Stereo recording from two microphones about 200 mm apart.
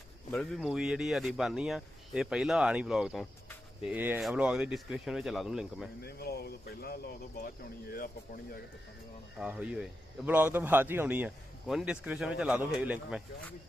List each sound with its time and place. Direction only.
0.3 s speech: centre (ahead or behind)
6.0 s speech: 50° left (ahead or behind)
9.4 s a man's voice: 5° right (ahead or behind)